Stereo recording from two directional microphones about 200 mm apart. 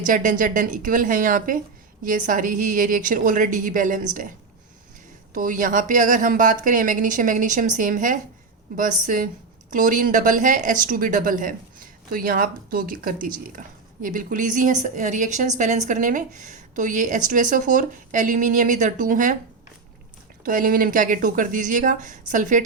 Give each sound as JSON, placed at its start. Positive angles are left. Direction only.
{"t": 0.0, "sound": "a woman's voice", "side_deg": -40}
{"t": 5.3, "sound": "a woman's voice", "side_deg": -40}
{"t": 20.4, "sound": "a woman's voice", "side_deg": -45}